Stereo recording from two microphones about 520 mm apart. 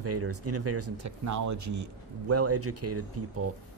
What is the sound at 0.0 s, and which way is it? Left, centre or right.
Speech, right.